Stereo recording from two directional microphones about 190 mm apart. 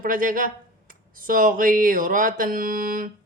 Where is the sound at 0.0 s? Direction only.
45° right (ahead or behind).